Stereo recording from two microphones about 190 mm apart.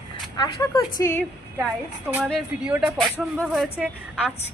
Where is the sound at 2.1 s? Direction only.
5° right (ahead or behind).